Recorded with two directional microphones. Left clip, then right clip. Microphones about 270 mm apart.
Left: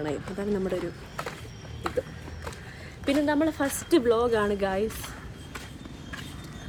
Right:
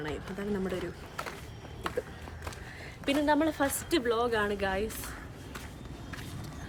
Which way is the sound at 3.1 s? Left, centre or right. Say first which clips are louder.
Left 2 dB; centre.